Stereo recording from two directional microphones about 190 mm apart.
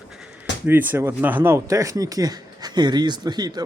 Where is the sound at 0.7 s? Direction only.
10° right (ahead or behind).